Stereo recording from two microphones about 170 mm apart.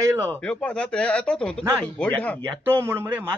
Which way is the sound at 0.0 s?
15° right (ahead or behind).